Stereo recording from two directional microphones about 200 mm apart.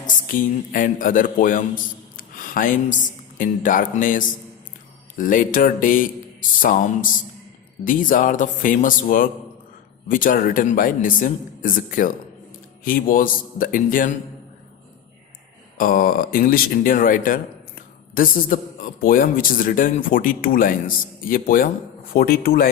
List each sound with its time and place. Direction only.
0.3 s a man's voice: 40° left (ahead or behind)
15.8 s speech: 45° left (ahead or behind)